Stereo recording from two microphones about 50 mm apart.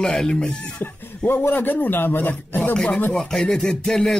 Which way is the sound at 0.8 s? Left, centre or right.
Left.